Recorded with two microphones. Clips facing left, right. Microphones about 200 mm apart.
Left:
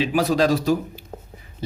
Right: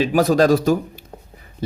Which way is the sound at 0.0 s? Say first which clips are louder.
Right 4 dB; 45° right (ahead or behind).